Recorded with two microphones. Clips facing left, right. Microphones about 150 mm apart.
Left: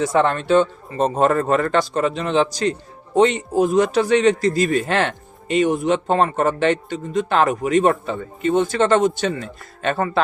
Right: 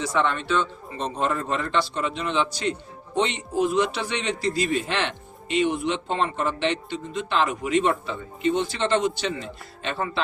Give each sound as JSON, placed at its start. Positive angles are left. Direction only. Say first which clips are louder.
{"t": 0.0, "sound": "a man's voice", "louder": "left 6 dB", "side_deg": 50}